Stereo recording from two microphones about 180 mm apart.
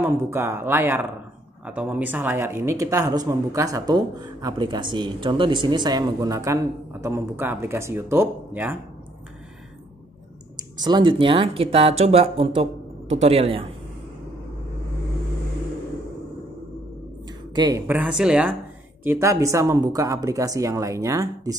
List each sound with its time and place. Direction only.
0.0 s speech: 15° right (ahead or behind)
10.5 s speech: 25° right (ahead or behind)
17.6 s speech: 20° right (ahead or behind)
19.0 s speech: 15° right (ahead or behind)